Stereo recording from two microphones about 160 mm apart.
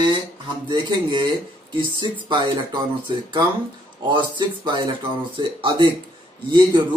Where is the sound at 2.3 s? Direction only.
30° right (ahead or behind).